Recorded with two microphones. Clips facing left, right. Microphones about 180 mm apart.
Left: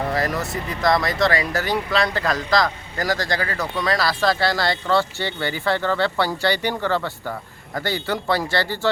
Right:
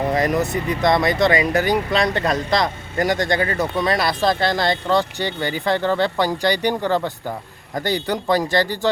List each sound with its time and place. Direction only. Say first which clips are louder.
0.1 s speech: right 4 dB; 20° right (ahead or behind)
1.6 s speech: right 4 dB; centre (ahead or behind)
2.1 s speech: right 1 dB; 25° right (ahead or behind)